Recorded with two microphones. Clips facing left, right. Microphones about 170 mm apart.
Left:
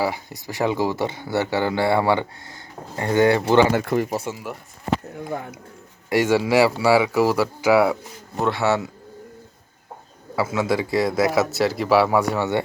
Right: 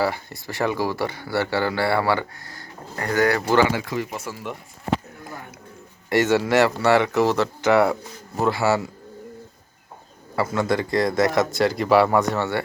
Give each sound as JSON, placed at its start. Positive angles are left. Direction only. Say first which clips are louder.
{"t": 0.0, "sound": "speech", "louder": "right 1 dB", "side_deg": 15}
{"t": 3.7, "sound": "speech", "louder": "left 5 dB", "side_deg": 50}
{"t": 6.1, "sound": "a man's voice", "louder": "even", "side_deg": 10}
{"t": 10.3, "sound": "a man's voice", "louder": "even", "side_deg": 5}